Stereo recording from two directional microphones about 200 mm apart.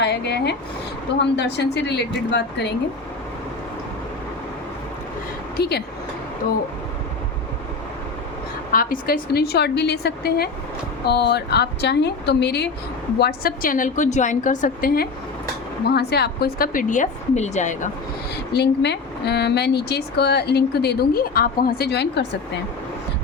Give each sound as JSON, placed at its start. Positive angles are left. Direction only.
{"t": 0.0, "sound": "a sound", "side_deg": 55}
{"t": 1.4, "sound": "speech", "side_deg": 55}
{"t": 5.5, "sound": "speech", "side_deg": 55}
{"t": 8.7, "sound": "a woman's voice", "side_deg": 45}
{"t": 18.5, "sound": "speech", "side_deg": 55}